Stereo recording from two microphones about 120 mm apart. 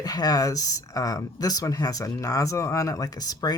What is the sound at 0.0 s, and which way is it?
Speech, 30° left (ahead or behind).